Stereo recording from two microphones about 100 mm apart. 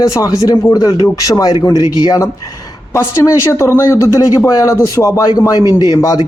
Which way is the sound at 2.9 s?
30° left (ahead or behind).